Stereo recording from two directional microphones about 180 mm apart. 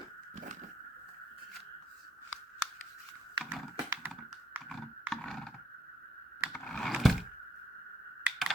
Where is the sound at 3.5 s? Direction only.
5° right (ahead or behind).